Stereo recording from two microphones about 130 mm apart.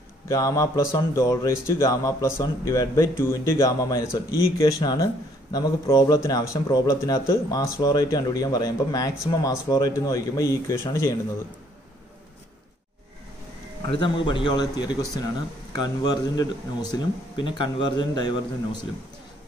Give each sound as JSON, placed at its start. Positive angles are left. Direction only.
{"t": 0.3, "sound": "speech", "side_deg": 25}
{"t": 13.8, "sound": "speech", "side_deg": 40}